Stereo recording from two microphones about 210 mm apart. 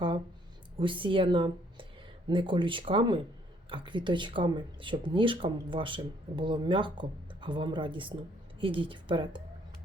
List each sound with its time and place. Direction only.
0.8 s speech: 25° right (ahead or behind)